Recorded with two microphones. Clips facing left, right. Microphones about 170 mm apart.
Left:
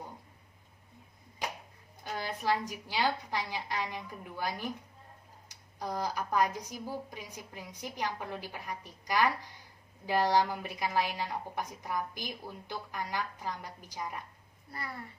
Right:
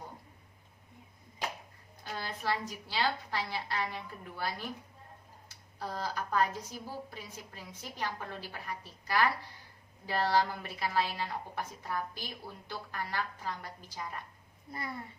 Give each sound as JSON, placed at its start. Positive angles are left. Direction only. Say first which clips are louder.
{"t": 2.1, "sound": "a woman's voice", "louder": "left 3 dB", "side_deg": 15}
{"t": 14.7, "sound": "a child's voice", "louder": "right 1 dB", "side_deg": -20}